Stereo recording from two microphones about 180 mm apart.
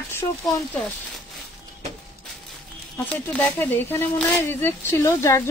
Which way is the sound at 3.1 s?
5° left (ahead or behind).